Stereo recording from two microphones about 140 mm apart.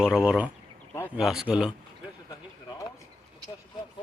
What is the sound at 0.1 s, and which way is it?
A man's voice, 5° right (ahead or behind).